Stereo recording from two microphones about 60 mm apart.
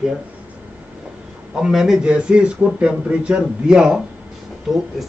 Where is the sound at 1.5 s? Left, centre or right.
Centre.